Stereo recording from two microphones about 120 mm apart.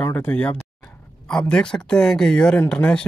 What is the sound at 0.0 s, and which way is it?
Speech, 15° left (ahead or behind).